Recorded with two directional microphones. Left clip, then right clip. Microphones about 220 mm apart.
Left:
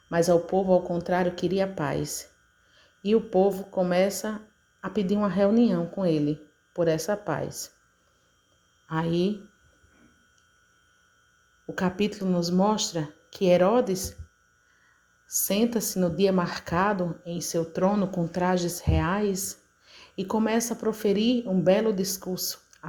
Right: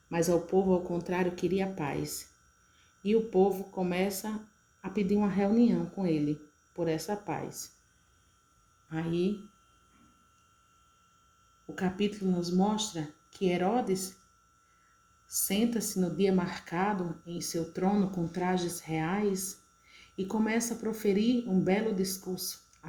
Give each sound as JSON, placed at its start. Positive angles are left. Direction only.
{"t": 0.5, "sound": "a woman's voice", "side_deg": 20}
{"t": 8.9, "sound": "speech", "side_deg": 30}
{"t": 11.6, "sound": "speech", "side_deg": 30}
{"t": 15.3, "sound": "a woman's voice", "side_deg": 30}